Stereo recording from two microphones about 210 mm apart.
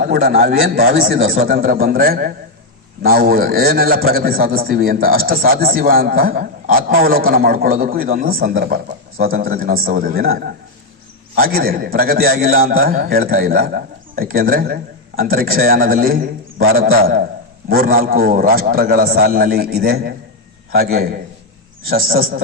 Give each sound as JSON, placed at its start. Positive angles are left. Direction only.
{"t": 0.0, "sound": "a man's voice", "side_deg": -45}